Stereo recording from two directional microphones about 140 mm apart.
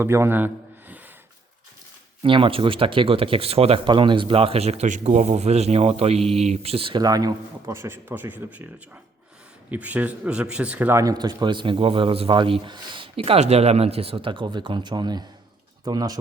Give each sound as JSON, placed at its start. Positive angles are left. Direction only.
{"t": 0.0, "sound": "a man's voice", "side_deg": -15}
{"t": 2.2, "sound": "speech", "side_deg": -40}
{"t": 7.0, "sound": "speech", "side_deg": -25}
{"t": 9.6, "sound": "speech", "side_deg": -10}
{"t": 11.0, "sound": "a man's voice", "side_deg": -30}